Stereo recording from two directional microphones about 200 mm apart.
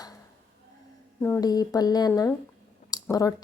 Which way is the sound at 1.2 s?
15° left (ahead or behind).